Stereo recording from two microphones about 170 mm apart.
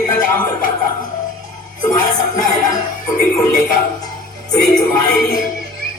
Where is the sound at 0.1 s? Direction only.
15° left (ahead or behind).